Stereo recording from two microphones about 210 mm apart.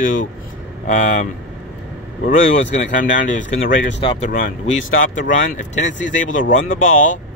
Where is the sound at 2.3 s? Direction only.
40° left (ahead or behind).